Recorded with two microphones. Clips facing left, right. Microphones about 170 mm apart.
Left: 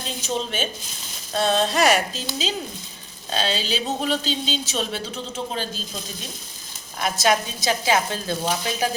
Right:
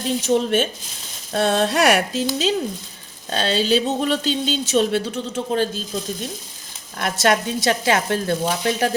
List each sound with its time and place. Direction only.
0.2 s speech: 65° right (ahead or behind)
7.0 s speech: 65° right (ahead or behind)